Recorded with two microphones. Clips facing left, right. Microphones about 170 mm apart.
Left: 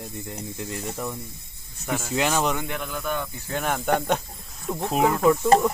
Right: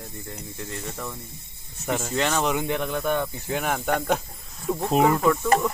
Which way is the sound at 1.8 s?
10° right (ahead or behind).